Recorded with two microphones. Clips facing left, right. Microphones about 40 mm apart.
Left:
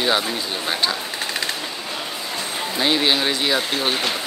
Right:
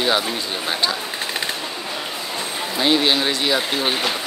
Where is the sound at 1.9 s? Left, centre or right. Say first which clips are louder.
Right 1 dB; centre.